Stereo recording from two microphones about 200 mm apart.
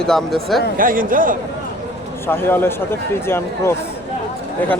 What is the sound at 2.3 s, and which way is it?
A man's voice, 10° left (ahead or behind).